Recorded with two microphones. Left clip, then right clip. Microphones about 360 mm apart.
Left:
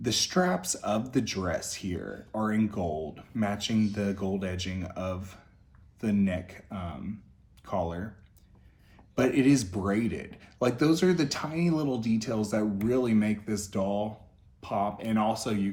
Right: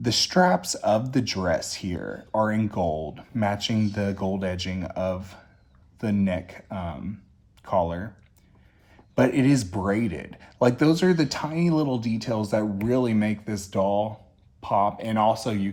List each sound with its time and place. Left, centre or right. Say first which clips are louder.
0.0 s speech: right 6 dB; right
9.1 s speech: right 3 dB; centre